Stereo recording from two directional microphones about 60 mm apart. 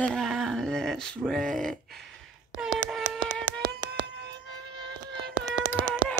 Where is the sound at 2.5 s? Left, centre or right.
Centre.